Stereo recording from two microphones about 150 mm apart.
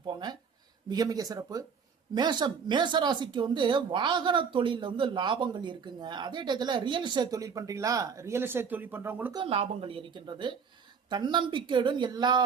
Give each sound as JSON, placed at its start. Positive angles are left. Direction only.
{"t": 0.0, "sound": "a sound", "side_deg": -30}
{"t": 0.9, "sound": "speech", "side_deg": -25}
{"t": 9.3, "sound": "speech", "side_deg": -35}